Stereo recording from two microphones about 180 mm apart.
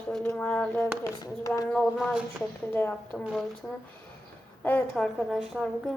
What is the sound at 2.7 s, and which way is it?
Speech, 10° left (ahead or behind).